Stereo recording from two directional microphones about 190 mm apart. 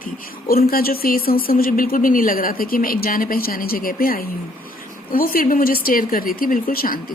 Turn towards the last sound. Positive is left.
turn(degrees=50)  # may be behind; listen again after turning